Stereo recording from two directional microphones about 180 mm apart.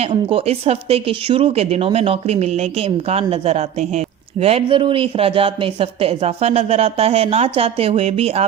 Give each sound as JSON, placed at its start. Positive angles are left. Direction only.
{"t": 0.0, "sound": "speech", "side_deg": -30}